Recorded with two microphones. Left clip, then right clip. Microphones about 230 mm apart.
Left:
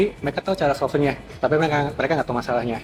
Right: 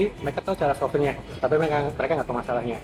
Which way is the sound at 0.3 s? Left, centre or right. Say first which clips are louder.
Left 3 dB; left.